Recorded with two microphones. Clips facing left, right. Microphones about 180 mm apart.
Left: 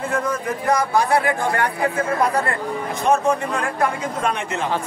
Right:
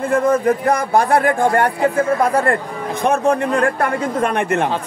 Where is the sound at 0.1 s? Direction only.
55° right (ahead or behind).